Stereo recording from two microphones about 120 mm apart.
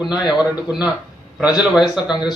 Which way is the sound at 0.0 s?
5° right (ahead or behind).